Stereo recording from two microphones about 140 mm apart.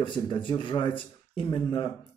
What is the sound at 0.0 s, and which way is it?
Speech, 35° left (ahead or behind).